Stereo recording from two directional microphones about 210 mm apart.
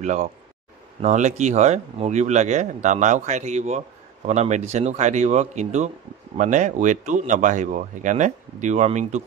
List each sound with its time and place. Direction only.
0.0 s speech: 35° right (ahead or behind)